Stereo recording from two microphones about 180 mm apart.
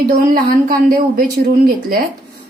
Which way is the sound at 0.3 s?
55° right (ahead or behind).